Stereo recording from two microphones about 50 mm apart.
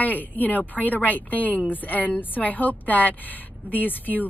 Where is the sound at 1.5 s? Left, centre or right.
Right.